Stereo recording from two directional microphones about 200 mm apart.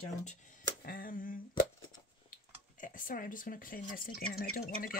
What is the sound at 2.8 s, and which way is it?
Speech, 40° left (ahead or behind).